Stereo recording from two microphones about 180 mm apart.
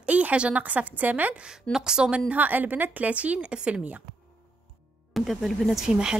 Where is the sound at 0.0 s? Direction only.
5° right (ahead or behind).